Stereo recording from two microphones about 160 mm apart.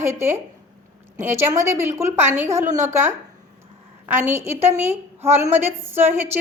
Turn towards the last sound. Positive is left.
turn(degrees=-15)  # may be behind; listen again after turning